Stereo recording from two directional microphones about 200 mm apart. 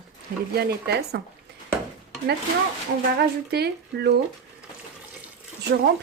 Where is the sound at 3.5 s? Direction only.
55° right (ahead or behind).